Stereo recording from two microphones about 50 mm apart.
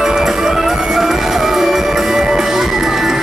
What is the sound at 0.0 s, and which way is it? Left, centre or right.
Music, centre.